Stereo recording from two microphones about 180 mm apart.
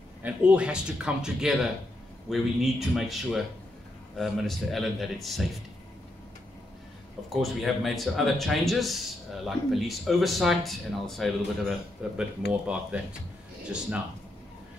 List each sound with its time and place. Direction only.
0.2 s speech: 5° right (ahead or behind)
7.3 s speech: centre (ahead or behind)